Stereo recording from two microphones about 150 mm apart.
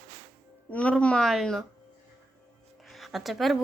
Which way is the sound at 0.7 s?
10° left (ahead or behind).